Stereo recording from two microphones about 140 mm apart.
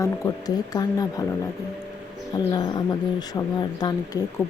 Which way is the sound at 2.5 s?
30° left (ahead or behind).